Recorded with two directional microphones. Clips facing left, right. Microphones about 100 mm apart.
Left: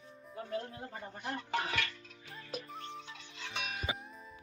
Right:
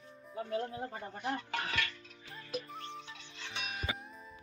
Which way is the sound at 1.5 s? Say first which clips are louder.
Left 3 dB; 20° left (ahead or behind).